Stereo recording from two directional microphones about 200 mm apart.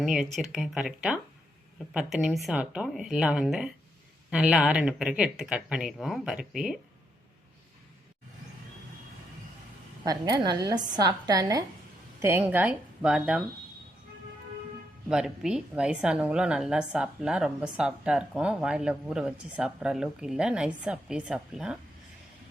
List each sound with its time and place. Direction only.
0.0 s a woman's voice: centre (ahead or behind)
10.0 s a woman's voice: 20° right (ahead or behind); by 13.4 s 5° right (ahead or behind)
15.1 s a woman's voice: 5° right (ahead or behind)